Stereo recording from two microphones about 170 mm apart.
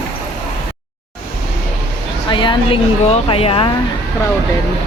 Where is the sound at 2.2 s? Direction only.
30° left (ahead or behind).